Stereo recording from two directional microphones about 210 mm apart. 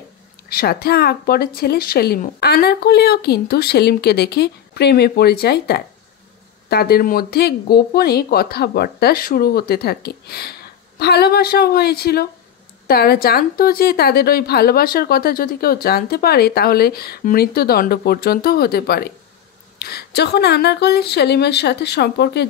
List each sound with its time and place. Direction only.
0.5 s a woman's voice: 45° left (ahead or behind)